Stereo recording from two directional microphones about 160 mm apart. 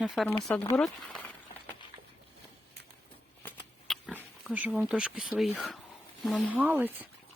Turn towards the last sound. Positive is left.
turn(degrees=-10)  # may be behind; listen again after turning